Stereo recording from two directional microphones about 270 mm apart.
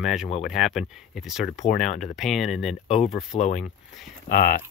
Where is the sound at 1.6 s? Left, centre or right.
Left.